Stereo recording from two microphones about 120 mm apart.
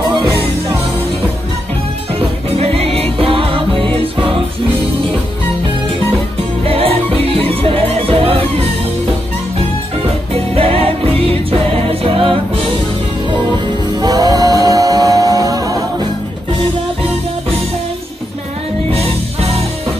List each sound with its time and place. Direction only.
2.1 s music: 55° right (ahead or behind)
6.6 s music: 55° right (ahead or behind)
10.3 s music: 55° right (ahead or behind)
13.9 s music: 30° right (ahead or behind)